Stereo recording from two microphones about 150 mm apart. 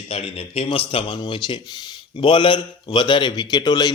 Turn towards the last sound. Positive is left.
turn(degrees=25)  # may be behind; listen again after turning